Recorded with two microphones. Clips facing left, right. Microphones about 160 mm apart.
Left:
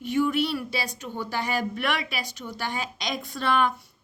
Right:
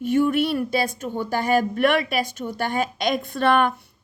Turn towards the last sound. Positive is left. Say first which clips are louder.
# right 5 dB
turn(degrees=-55)  # may be behind; listen again after turning